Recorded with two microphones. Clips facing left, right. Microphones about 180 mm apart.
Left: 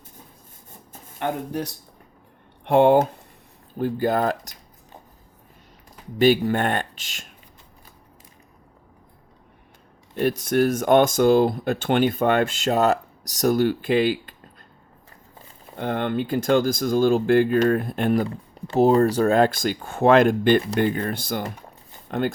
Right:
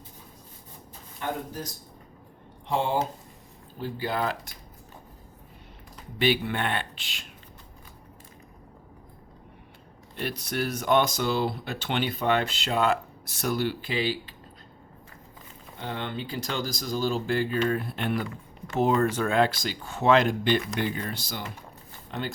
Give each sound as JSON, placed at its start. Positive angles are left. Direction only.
{"t": 1.2, "sound": "speech", "side_deg": 65}
{"t": 3.8, "sound": "speech", "side_deg": 50}
{"t": 6.1, "sound": "speech", "side_deg": 45}
{"t": 10.2, "sound": "speech", "side_deg": 45}
{"t": 15.8, "sound": "speech", "side_deg": 55}